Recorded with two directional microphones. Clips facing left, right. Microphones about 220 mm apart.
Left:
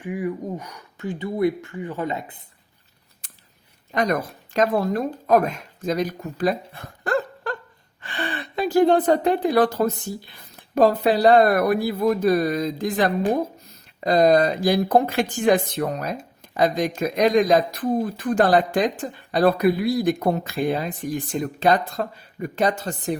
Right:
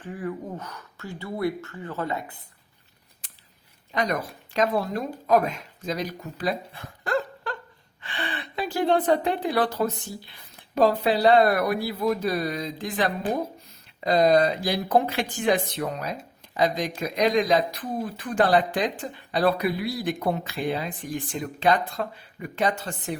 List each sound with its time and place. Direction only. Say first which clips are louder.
0.0 s speech: left 5 dB; 15° left (ahead or behind)
4.5 s a woman's voice: left 4 dB; 50° left (ahead or behind)